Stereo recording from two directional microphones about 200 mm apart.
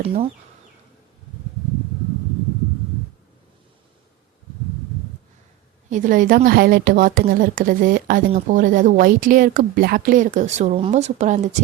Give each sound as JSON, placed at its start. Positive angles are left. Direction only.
{"t": 0.0, "sound": "speech", "side_deg": -30}
{"t": 5.9, "sound": "a woman's voice", "side_deg": -40}